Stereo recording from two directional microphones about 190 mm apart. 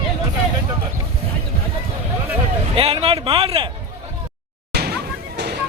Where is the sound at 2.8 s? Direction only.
30° right (ahead or behind).